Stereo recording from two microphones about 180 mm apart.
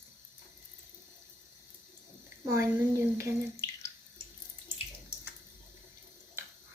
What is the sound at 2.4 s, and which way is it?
Speech, 15° right (ahead or behind).